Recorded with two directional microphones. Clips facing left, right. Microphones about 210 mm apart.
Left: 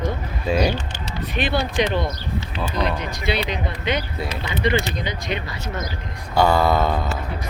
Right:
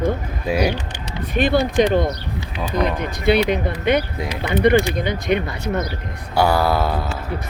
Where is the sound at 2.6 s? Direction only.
15° right (ahead or behind).